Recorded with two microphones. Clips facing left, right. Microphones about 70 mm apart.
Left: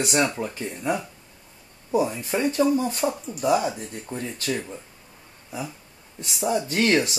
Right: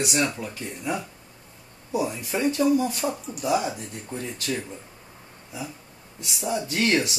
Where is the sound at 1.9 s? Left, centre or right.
Left.